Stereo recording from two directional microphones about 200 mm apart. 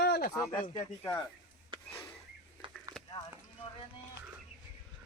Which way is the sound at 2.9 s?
20° right (ahead or behind).